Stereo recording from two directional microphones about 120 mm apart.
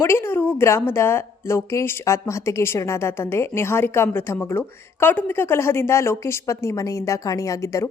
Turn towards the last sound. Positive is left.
turn(degrees=25)  # may be behind; listen again after turning